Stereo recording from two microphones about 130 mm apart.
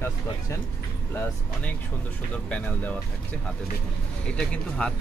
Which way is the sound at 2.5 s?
10° left (ahead or behind).